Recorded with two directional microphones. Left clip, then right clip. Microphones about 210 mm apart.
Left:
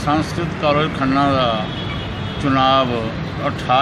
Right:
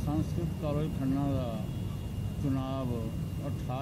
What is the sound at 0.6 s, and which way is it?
Speech, 30° left (ahead or behind).